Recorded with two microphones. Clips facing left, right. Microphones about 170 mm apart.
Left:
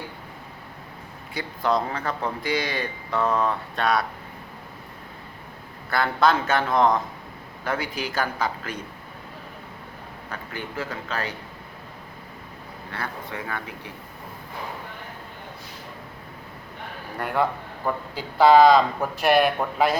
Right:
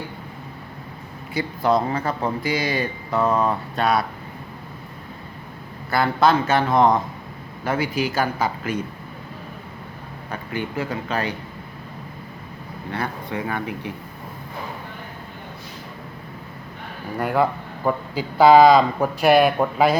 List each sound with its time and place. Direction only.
1.3 s speech: 5° right (ahead or behind)
5.9 s speech: 5° right (ahead or behind)
10.3 s speech: 15° right (ahead or behind)
12.9 s speech: 20° right (ahead or behind)
17.2 s speech: 5° right (ahead or behind)